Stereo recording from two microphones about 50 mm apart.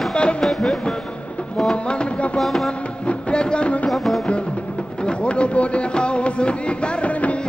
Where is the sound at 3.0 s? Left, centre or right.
Centre.